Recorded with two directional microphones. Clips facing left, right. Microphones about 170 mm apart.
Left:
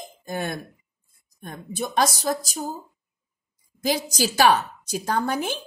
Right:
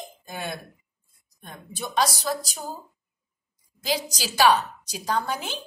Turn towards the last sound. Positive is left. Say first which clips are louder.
# left 3 dB
turn(degrees=50)  # may be behind; listen again after turning